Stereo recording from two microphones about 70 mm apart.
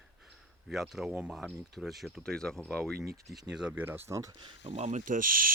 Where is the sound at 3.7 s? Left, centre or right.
Right.